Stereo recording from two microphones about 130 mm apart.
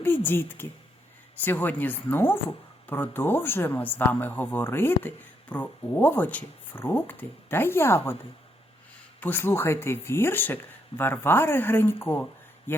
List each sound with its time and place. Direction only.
0.0 s speech: 15° left (ahead or behind)
9.2 s speech: 15° left (ahead or behind)